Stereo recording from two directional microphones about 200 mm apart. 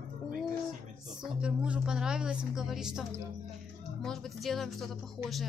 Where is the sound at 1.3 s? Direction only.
5° right (ahead or behind).